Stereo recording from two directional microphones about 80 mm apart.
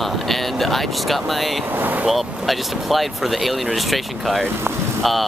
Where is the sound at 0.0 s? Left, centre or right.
Centre.